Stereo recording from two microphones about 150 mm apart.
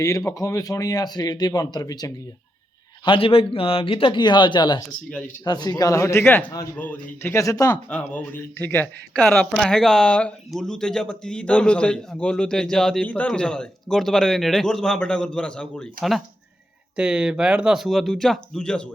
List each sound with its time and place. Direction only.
0.0 s speech: 20° left (ahead or behind)
3.0 s speech: 35° left (ahead or behind)
7.9 s speech: 10° left (ahead or behind)